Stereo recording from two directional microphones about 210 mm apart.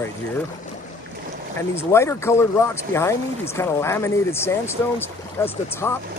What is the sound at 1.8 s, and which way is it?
Speech, 10° left (ahead or behind).